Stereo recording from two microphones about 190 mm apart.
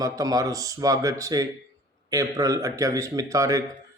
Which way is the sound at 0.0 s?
20° right (ahead or behind).